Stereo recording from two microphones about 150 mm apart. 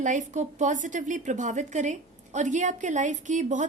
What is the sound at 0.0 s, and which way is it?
A woman's voice, 55° right (ahead or behind).